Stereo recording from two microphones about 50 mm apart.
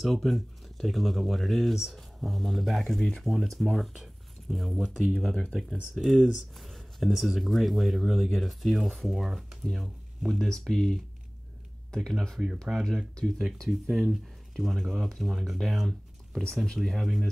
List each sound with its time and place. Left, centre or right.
0.0 s speech: centre
5.3 s speech: centre
5.9 s speech: centre
6.5 s speech: centre
10.7 s speech: centre
12.7 s speech: centre
16.4 s speech: centre